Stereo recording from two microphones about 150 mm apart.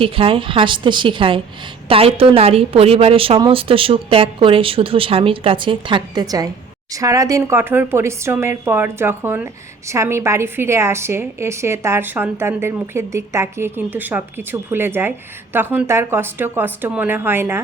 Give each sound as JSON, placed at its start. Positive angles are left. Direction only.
{"t": 0.0, "sound": "a woman's voice", "side_deg": -35}